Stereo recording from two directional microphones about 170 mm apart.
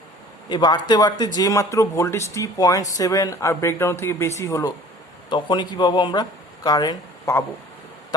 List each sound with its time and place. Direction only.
0.4 s speech: 25° left (ahead or behind)